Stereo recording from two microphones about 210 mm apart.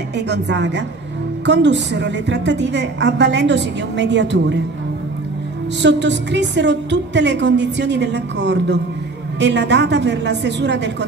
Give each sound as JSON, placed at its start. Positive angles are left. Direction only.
{"t": 0.3, "sound": "a woman's voice", "side_deg": -55}
{"t": 5.8, "sound": "a woman's voice", "side_deg": -55}